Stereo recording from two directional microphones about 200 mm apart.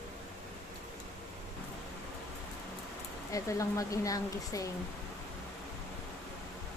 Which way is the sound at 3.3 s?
15° left (ahead or behind).